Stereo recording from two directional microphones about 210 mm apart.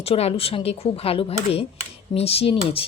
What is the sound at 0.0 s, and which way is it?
A woman's voice, 30° left (ahead or behind).